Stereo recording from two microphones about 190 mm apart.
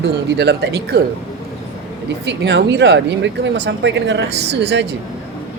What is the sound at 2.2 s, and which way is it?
Speech, 65° right (ahead or behind).